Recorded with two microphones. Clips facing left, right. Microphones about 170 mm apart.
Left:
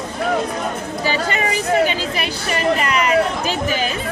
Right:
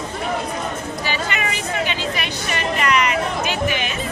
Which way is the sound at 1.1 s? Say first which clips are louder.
Left 5 dB; 35° left (ahead or behind).